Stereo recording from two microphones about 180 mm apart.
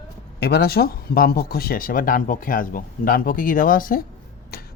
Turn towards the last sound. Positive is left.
turn(degrees=60)  # may be behind; listen again after turning